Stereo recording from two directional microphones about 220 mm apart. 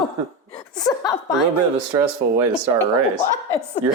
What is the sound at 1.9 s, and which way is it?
Speech, 15° right (ahead or behind).